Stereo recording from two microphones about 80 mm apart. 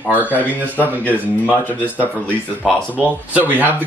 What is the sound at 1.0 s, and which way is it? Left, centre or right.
Speech, left.